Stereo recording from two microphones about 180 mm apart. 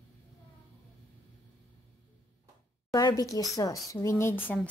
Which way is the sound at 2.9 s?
20° left (ahead or behind).